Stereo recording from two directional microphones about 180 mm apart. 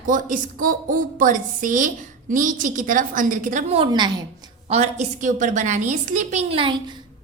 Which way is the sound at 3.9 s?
25° right (ahead or behind).